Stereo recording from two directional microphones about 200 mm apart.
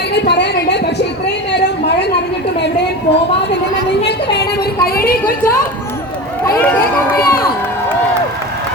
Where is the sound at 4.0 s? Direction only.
55° left (ahead or behind).